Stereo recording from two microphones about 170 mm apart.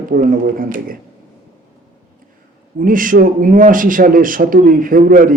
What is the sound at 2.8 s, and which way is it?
A man's voice, 55° right (ahead or behind).